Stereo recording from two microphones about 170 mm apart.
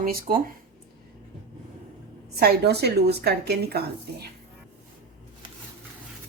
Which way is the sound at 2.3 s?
70° right (ahead or behind).